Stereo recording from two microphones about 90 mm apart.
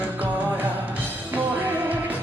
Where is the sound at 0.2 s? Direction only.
20° right (ahead or behind).